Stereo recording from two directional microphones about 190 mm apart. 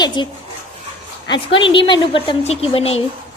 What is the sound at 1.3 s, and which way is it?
A woman's voice, 25° left (ahead or behind).